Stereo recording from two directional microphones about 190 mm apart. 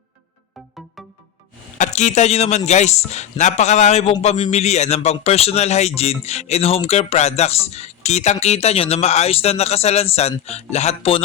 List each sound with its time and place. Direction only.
1.8 s speech: 40° left (ahead or behind)